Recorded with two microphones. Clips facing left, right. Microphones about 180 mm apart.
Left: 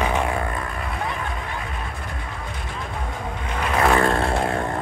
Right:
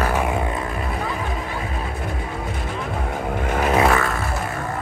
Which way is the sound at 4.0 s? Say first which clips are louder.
Left 4 dB; 30° left (ahead or behind).